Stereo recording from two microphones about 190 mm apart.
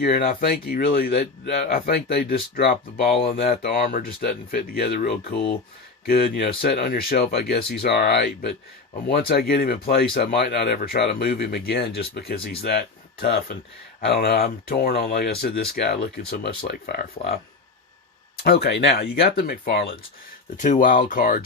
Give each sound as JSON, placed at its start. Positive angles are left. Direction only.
{"t": 0.0, "sound": "speech", "side_deg": 50}
{"t": 18.4, "sound": "speech", "side_deg": 55}
{"t": 20.6, "sound": "speech", "side_deg": 45}